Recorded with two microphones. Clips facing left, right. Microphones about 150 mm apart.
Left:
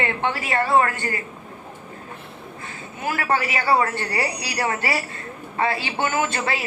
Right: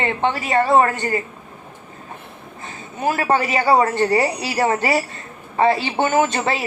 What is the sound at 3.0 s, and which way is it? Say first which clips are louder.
Speech: right 5 dB; 20° right (ahead or behind).